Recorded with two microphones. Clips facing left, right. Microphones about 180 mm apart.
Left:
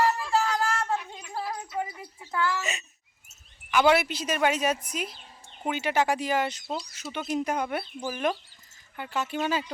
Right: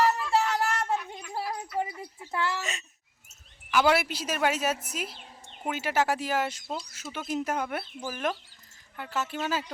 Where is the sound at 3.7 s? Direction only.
5° right (ahead or behind).